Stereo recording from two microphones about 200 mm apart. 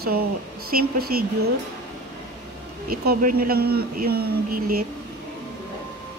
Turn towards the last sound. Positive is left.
turn(degrees=-50)  # may be behind; listen again after turning